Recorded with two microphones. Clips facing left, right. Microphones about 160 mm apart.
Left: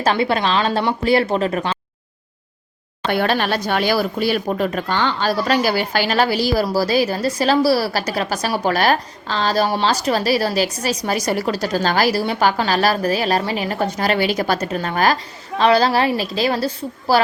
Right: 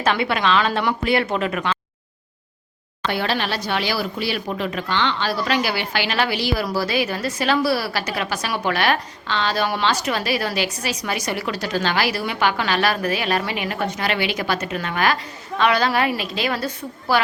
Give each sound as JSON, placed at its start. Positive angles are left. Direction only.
{"t": 0.0, "sound": "speech", "side_deg": 35}
{"t": 3.1, "sound": "speech", "side_deg": 50}